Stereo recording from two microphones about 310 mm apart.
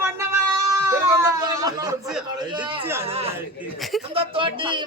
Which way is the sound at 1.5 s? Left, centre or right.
Centre.